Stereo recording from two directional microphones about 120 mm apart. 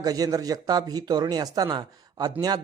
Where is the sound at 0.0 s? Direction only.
30° right (ahead or behind).